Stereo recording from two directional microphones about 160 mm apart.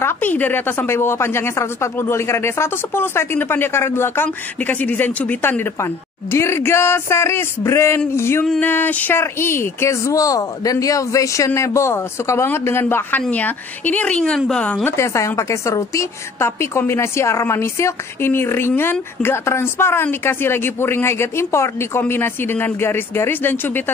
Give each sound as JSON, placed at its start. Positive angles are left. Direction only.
{"t": 0.0, "sound": "a woman's voice", "side_deg": 10}